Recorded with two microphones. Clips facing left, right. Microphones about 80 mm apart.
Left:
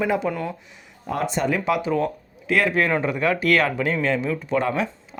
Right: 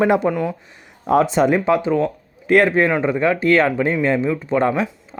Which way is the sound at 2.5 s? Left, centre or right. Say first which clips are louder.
Right 7 dB; right.